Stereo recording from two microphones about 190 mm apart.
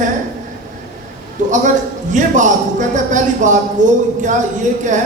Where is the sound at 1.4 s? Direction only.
40° right (ahead or behind).